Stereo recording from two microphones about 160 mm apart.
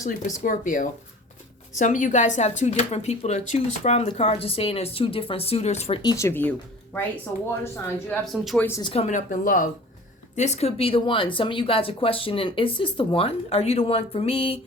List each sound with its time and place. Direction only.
0.0 s speech: 55° left (ahead or behind)
6.0 s speech: 20° left (ahead or behind)
7.6 s speech: 15° left (ahead or behind)
8.2 s speech: centre (ahead or behind)
8.8 s speech: 40° left (ahead or behind); by 9.6 s 55° left (ahead or behind)
10.3 s speech: 45° left (ahead or behind)